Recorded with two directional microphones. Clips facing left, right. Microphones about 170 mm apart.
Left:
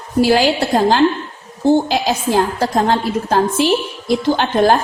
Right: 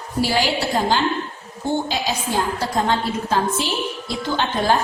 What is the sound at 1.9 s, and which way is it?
A woman's voice, 55° left (ahead or behind).